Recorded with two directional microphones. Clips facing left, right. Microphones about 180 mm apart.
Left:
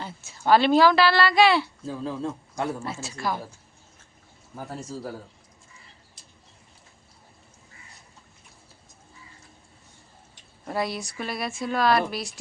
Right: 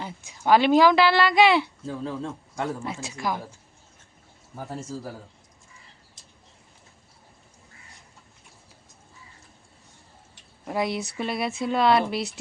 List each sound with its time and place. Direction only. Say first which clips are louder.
0.0 s speech: even; 15° right (ahead or behind)
1.9 s a man's voice: left 3 dB; 10° left (ahead or behind)
2.8 s speech: even; 15° right (ahead or behind)
4.5 s speech: right 1 dB; centre (ahead or behind)
10.7 s speech: right 2 dB; 20° right (ahead or behind)